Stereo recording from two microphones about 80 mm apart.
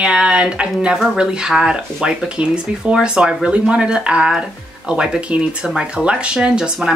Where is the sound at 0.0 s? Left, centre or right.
Centre.